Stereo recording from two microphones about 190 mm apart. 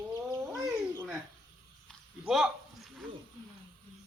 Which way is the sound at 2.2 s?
Centre (ahead or behind).